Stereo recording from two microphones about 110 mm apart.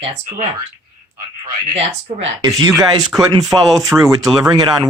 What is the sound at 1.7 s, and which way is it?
Speech, 70° right (ahead or behind).